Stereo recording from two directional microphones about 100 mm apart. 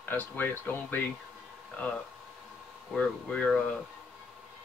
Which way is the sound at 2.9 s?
10° left (ahead or behind).